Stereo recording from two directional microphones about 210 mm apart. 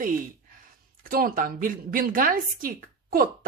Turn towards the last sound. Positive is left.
turn(degrees=-45)  # may be behind; listen again after turning